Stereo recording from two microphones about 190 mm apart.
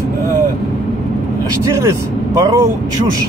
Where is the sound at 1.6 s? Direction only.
15° right (ahead or behind).